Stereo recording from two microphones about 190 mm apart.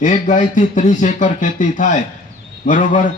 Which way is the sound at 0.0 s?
40° left (ahead or behind).